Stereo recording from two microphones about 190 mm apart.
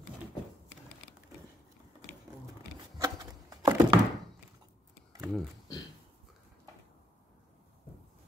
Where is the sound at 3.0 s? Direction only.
20° right (ahead or behind).